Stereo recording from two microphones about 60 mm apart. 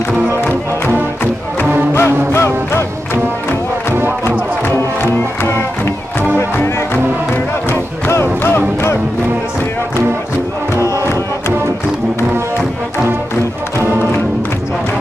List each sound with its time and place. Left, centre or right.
0.4 s music: left
2.0 s music: left
5.0 s music: left
8.1 s music: left
10.8 s music: left